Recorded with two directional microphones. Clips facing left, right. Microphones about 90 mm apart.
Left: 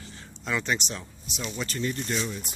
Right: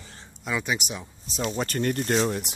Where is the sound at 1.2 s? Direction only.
40° right (ahead or behind); by 2.5 s 60° right (ahead or behind).